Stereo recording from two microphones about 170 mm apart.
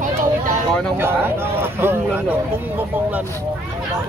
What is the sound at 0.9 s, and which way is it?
Speech, 15° right (ahead or behind).